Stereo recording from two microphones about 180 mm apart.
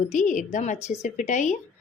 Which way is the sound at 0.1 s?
45° left (ahead or behind).